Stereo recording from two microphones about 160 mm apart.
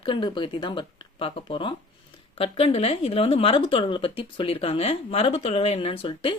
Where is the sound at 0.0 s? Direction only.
30° left (ahead or behind).